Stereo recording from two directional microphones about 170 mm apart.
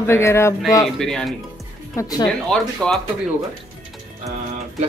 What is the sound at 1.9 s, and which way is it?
Speech, 20° left (ahead or behind).